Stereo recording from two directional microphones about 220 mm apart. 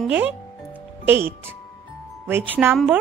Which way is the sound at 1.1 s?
10° right (ahead or behind).